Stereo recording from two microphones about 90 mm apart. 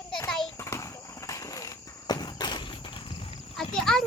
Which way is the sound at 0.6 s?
35° left (ahead or behind).